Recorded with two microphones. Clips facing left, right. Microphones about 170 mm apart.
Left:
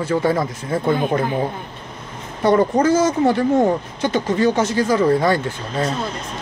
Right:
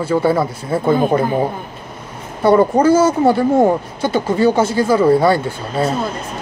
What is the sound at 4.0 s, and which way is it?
Speech, 10° right (ahead or behind).